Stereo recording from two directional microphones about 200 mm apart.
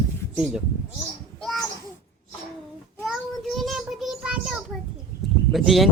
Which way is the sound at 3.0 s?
Centre (ahead or behind).